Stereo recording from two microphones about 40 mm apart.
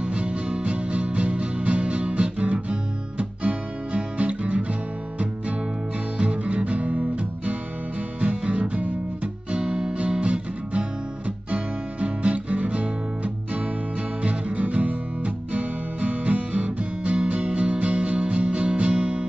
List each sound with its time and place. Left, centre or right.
0.0 s music: right
6.1 s music: right
8.2 s guitar: right
14.2 s music: right